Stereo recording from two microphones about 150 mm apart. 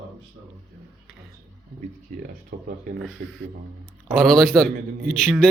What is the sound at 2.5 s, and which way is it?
Speech, 90° right.